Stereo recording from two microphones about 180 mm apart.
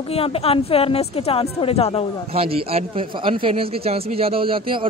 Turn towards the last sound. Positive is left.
turn(degrees=-30)  # may be behind; listen again after turning